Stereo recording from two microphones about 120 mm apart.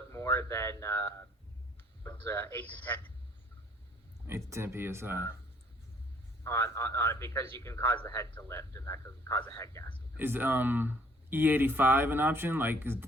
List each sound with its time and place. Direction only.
0.1 s a man's voice: 20° left (ahead or behind)
4.3 s speech: 25° right (ahead or behind)
6.4 s a man's voice: 20° left (ahead or behind)
10.2 s speech: 15° right (ahead or behind)